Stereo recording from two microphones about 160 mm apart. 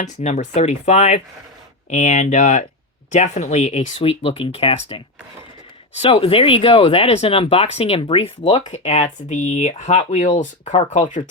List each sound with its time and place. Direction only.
0.0 s speech: 45° left (ahead or behind)